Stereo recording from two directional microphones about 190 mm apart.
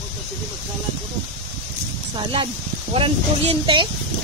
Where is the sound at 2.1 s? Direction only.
25° right (ahead or behind).